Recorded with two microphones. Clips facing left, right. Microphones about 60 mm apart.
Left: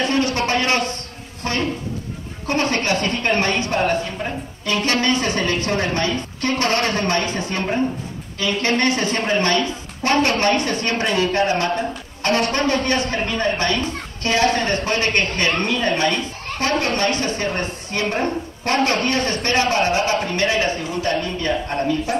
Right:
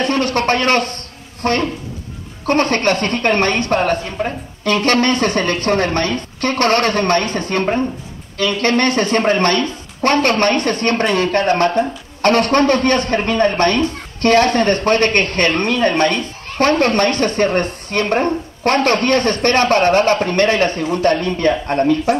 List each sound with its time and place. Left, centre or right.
0.0 s speech: right